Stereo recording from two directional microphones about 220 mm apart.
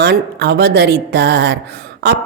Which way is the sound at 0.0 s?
50° right (ahead or behind).